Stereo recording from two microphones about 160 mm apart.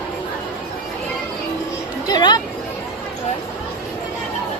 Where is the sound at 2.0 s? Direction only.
25° left (ahead or behind).